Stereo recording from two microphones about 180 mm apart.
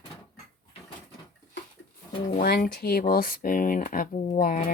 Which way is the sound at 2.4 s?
55° left (ahead or behind).